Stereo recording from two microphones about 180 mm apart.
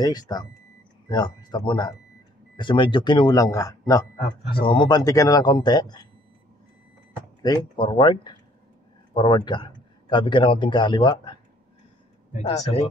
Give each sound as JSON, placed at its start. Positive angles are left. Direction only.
{"t": 0.0, "sound": "a man's voice", "side_deg": 20}
{"t": 7.4, "sound": "a man's voice", "side_deg": 25}
{"t": 12.3, "sound": "speech", "side_deg": 40}